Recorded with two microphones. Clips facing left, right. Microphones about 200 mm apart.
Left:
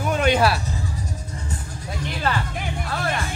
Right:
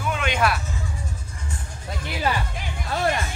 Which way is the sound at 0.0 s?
40° left (ahead or behind).